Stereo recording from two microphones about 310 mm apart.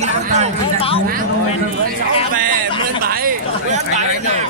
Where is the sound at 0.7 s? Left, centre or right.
Centre.